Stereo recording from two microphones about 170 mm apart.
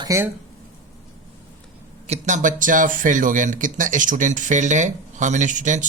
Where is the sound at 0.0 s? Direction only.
20° right (ahead or behind).